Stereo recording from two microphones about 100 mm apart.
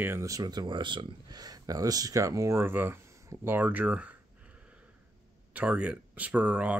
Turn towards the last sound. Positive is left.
turn(degrees=-10)  # may be behind; listen again after turning